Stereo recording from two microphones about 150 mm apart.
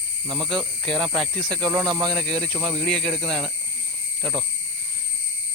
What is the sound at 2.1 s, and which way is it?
Speech, 5° left (ahead or behind).